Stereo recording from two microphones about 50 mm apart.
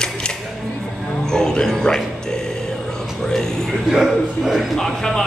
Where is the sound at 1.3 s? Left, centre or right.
Centre.